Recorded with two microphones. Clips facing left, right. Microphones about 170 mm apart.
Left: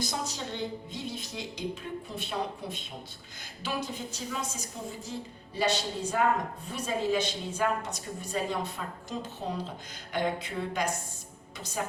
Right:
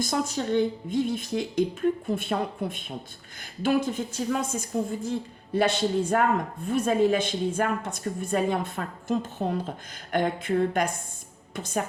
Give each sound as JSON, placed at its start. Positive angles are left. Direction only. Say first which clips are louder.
{"t": 0.0, "sound": "speech", "louder": "right 7 dB", "side_deg": -50}